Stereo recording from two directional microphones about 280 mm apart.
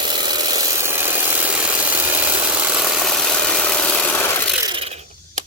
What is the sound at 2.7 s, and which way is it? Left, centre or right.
Vehicle, centre.